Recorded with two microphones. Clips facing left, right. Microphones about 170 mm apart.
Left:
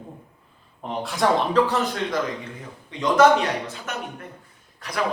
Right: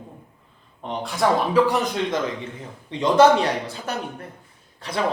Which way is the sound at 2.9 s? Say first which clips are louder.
Right 1 dB; 30° right (ahead or behind).